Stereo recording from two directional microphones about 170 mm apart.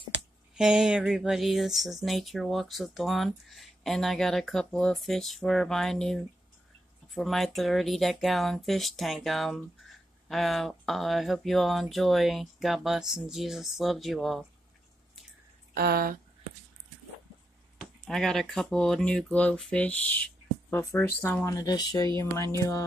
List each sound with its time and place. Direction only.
0.6 s speech: 5° right (ahead or behind)
7.2 s speech: centre (ahead or behind)
15.7 s speech: 65° right (ahead or behind)
17.7 s speech: centre (ahead or behind); by 22.8 s 20° left (ahead or behind)